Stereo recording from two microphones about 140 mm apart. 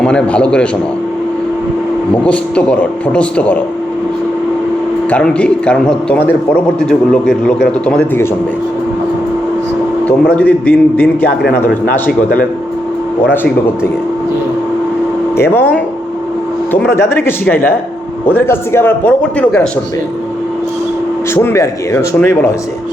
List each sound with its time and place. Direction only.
0.0 s a man's voice: 5° left (ahead or behind)
2.2 s a man's voice: 10° left (ahead or behind)
5.1 s a man's voice: 10° left (ahead or behind)
10.1 s a man's voice: 10° left (ahead or behind)
15.4 s a man's voice: 15° left (ahead or behind)
21.3 s speech: 20° left (ahead or behind)